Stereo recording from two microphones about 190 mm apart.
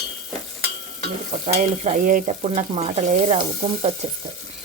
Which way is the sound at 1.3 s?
35° right (ahead or behind).